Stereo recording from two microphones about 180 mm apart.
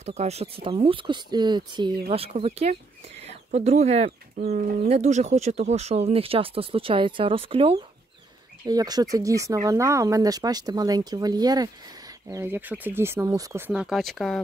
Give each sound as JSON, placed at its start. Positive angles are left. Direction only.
{"t": 0.0, "sound": "speech", "side_deg": -40}
{"t": 4.4, "sound": "speech", "side_deg": -50}
{"t": 8.6, "sound": "speech", "side_deg": -20}
{"t": 13.7, "sound": "speech", "side_deg": -5}